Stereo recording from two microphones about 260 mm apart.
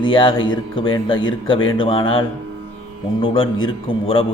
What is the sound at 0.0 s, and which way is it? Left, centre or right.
Speech, centre.